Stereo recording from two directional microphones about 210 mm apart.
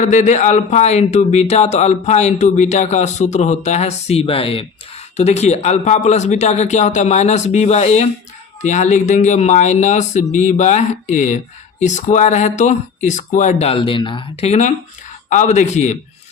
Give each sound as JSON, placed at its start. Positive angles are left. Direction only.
{"t": 0.0, "sound": "a man's voice", "side_deg": 35}